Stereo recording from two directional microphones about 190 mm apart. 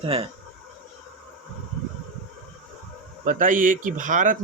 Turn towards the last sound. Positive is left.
turn(degrees=-45)  # may be behind; listen again after turning